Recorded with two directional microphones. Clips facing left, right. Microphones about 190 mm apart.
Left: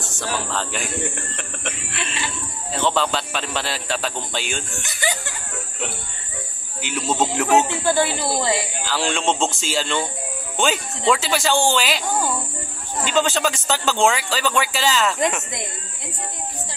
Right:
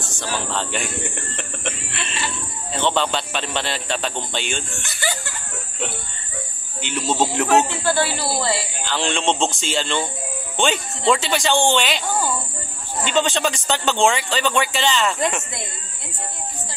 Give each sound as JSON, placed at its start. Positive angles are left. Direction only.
{"t": 0.1, "sound": "speech", "side_deg": 0}
{"t": 6.8, "sound": "speech", "side_deg": 5}
{"t": 7.8, "sound": "speech", "side_deg": 20}
{"t": 8.8, "sound": "speech", "side_deg": 5}
{"t": 13.0, "sound": "speech", "side_deg": 5}